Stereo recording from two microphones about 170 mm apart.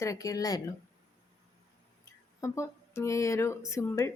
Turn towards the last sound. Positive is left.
turn(degrees=15)  # may be behind; listen again after turning